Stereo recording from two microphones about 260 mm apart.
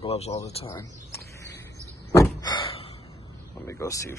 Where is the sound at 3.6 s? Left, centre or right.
Centre.